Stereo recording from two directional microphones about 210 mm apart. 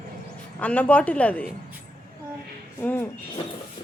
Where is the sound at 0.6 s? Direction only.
5° left (ahead or behind).